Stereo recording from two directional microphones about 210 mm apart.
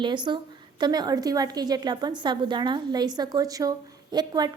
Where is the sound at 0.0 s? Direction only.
20° right (ahead or behind).